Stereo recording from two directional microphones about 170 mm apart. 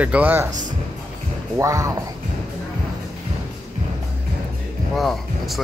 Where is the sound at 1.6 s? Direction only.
15° right (ahead or behind).